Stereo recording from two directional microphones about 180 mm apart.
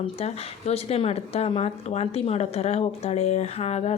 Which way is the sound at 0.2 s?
35° left (ahead or behind).